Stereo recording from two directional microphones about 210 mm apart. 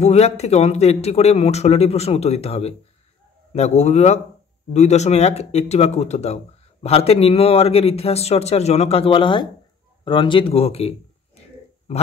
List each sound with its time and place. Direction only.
0.0 s a man's voice: 30° left (ahead or behind)